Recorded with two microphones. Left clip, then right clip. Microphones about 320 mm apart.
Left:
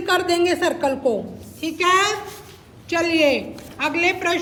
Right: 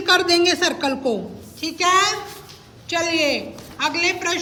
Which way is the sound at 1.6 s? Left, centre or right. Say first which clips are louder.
Even; centre.